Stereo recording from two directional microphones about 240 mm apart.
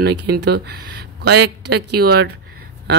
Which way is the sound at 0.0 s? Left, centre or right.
Right.